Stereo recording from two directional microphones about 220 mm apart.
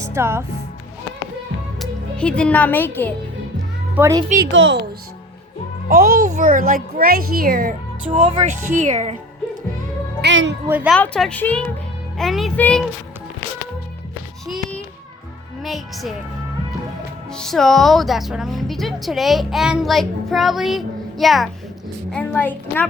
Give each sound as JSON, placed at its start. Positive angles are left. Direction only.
{"t": 0.0, "sound": "speech", "side_deg": -10}
{"t": 1.8, "sound": "speech", "side_deg": 5}
{"t": 3.9, "sound": "speech", "side_deg": -10}
{"t": 4.4, "sound": "a woman's voice", "side_deg": -55}
{"t": 5.9, "sound": "a child's voice", "side_deg": -35}
{"t": 10.2, "sound": "music", "side_deg": -55}
{"t": 10.7, "sound": "speech", "side_deg": -5}
{"t": 10.9, "sound": "speech", "side_deg": 5}
{"t": 14.4, "sound": "a sound", "side_deg": 0}
{"t": 15.6, "sound": "speech", "side_deg": 0}
{"t": 17.3, "sound": "a woman's voice", "side_deg": 0}